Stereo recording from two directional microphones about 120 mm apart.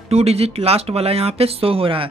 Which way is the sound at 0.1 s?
60° right (ahead or behind).